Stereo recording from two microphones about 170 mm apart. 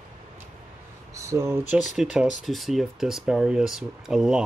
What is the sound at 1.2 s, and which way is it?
Speech, 15° right (ahead or behind).